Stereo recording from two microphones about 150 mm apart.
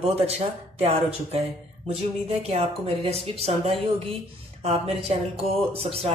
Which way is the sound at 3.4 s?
40° right (ahead or behind).